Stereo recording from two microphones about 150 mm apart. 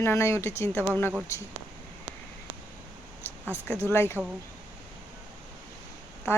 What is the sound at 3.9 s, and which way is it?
Speech, 15° left (ahead or behind).